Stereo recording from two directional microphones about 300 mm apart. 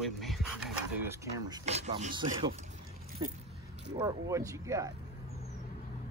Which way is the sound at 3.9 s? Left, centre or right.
Centre.